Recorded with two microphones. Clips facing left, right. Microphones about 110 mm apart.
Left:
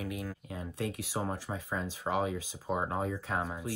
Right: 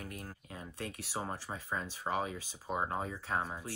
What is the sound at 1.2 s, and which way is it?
Speech, centre (ahead or behind).